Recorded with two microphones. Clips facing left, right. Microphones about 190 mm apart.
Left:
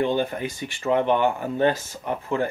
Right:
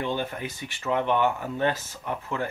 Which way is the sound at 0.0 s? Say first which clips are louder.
Left 6 dB; 30° left (ahead or behind).